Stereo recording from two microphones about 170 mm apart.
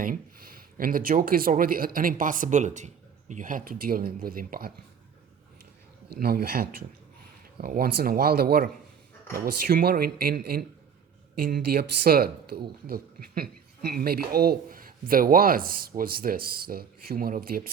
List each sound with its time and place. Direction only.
0.0 s speech: 55° right (ahead or behind)
6.1 s speech: 65° right (ahead or behind)